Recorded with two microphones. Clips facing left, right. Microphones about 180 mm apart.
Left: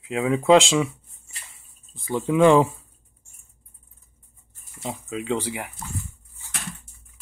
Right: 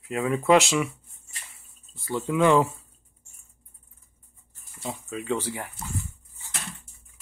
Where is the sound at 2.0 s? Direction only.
15° left (ahead or behind).